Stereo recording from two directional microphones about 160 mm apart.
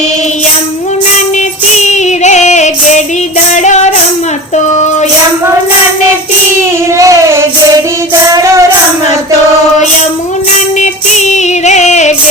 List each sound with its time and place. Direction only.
1.8 s female singing: 45° left (ahead or behind)
3.5 s music: 45° left (ahead or behind)
4.5 s child singing: 45° left (ahead or behind)
6.9 s child singing: 20° right (ahead or behind)
8.3 s music: 20° right (ahead or behind)
10.8 s music: 45° left (ahead or behind)